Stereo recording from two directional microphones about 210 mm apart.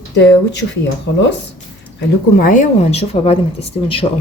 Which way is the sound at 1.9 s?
40° left (ahead or behind).